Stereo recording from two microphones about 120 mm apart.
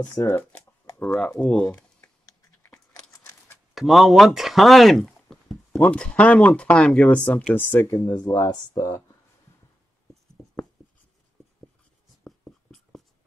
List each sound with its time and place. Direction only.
0.3 s speech: 15° left (ahead or behind)
1.0 s speech: 5° left (ahead or behind)
1.7 s computer keyboard: 15° left (ahead or behind)
2.6 s a sound: 25° left (ahead or behind)
3.7 s speech: centre (ahead or behind); by 9.0 s 25° left (ahead or behind)
12.2 s writing: 5° left (ahead or behind)